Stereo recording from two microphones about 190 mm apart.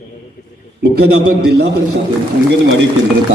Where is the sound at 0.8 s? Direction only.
60° right (ahead or behind).